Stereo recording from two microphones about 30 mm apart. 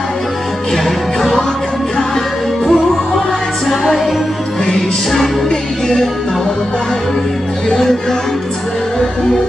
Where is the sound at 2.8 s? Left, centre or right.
Centre.